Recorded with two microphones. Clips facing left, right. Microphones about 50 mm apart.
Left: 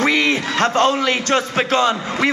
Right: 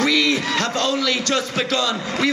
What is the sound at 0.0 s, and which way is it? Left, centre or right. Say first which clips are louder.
A man's voice: left 2 dB; left.